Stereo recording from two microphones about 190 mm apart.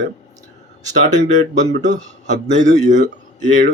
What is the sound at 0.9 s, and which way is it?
A man's voice, 40° right (ahead or behind).